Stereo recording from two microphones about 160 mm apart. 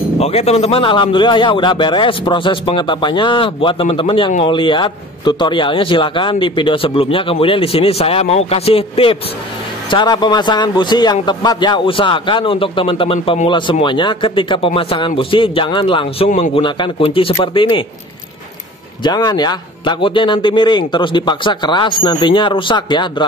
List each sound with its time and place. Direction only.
0.2 s a man's voice: 40° left (ahead or behind)
19.0 s a man's voice: 25° left (ahead or behind)